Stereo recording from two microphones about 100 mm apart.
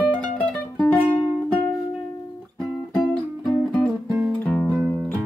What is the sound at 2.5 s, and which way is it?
Music, 5° left (ahead or behind).